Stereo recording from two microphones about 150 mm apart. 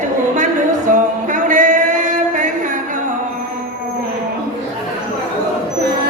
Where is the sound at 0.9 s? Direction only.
60° right (ahead or behind).